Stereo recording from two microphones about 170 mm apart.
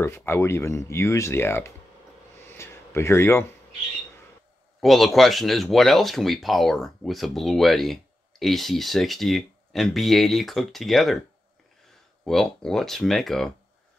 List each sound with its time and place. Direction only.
0.0 s speech: 15° left (ahead or behind)
2.5 s a sound: 15° left (ahead or behind)
4.7 s speech: centre (ahead or behind)
12.3 s speech: 5° left (ahead or behind)